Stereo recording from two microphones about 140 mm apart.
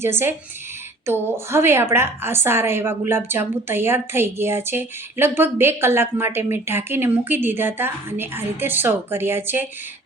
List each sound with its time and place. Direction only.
0.0 s a woman's voice: 15° right (ahead or behind)